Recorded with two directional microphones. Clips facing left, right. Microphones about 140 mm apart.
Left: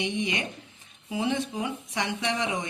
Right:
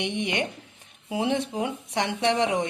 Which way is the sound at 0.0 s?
65° right (ahead or behind).